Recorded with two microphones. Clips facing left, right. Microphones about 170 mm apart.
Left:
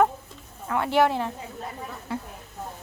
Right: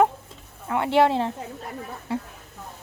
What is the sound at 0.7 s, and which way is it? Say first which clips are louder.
Speech: right 2 dB; 25° right (ahead or behind).